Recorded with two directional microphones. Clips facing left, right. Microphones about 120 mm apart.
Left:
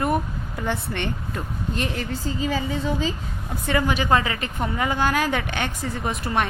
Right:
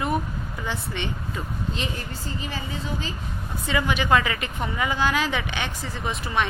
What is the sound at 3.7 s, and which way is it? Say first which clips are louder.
A woman's voice: left 1 dB; 40° left (ahead or behind).